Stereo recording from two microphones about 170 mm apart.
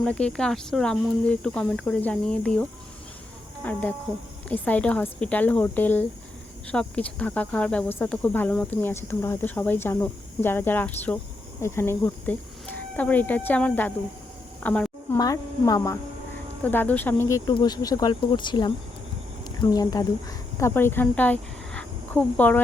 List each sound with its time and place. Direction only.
0.0 s speech: 5° left (ahead or behind)
14.6 s a sound: 5° left (ahead or behind)
15.2 s speech: 20° left (ahead or behind)